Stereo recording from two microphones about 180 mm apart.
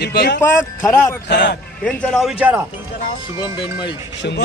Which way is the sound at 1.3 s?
75° left (ahead or behind).